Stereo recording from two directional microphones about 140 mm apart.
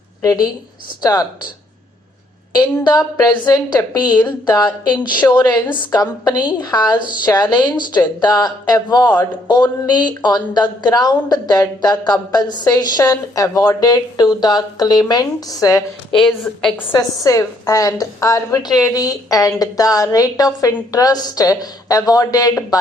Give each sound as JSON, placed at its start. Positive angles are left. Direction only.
{"t": 0.2, "sound": "speech", "side_deg": 25}
{"t": 2.6, "sound": "a woman's voice", "side_deg": 30}
{"t": 16.1, "sound": "speech", "side_deg": 5}
{"t": 16.9, "sound": "a woman's voice", "side_deg": 25}